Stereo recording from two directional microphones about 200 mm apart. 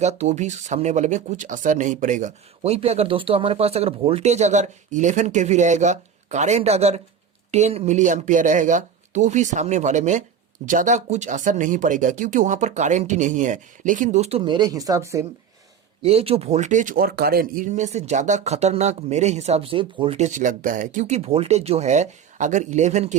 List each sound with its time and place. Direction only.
0.0 s speech: 35° right (ahead or behind); by 15.3 s 15° right (ahead or behind)
16.0 s speech: 30° right (ahead or behind)